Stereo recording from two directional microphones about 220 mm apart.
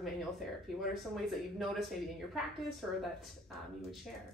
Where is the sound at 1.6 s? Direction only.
Centre (ahead or behind).